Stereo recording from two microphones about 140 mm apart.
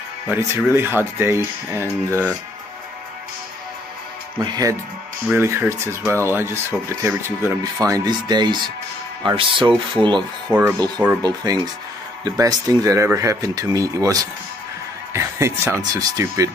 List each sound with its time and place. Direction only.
0.3 s speech: 15° right (ahead or behind)
4.4 s speech: 25° right (ahead or behind)
11.2 s speech: 25° right (ahead or behind)